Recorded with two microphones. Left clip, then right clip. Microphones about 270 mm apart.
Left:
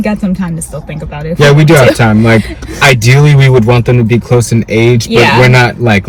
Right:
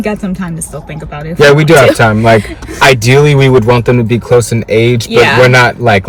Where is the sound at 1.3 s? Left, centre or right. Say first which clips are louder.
Right 2 dB; centre.